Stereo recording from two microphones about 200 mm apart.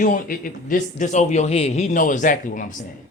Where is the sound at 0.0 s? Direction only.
45° left (ahead or behind).